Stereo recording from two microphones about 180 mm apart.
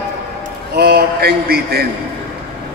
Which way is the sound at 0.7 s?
60° right (ahead or behind).